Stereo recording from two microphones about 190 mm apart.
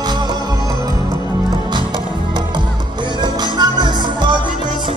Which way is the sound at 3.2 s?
25° right (ahead or behind).